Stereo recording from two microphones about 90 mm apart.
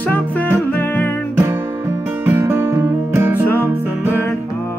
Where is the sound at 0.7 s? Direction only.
20° left (ahead or behind).